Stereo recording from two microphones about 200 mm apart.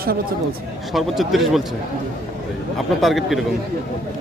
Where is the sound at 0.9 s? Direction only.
Centre (ahead or behind).